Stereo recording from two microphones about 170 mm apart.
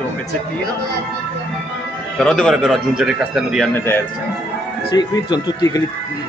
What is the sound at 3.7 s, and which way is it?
Speech, 10° left (ahead or behind).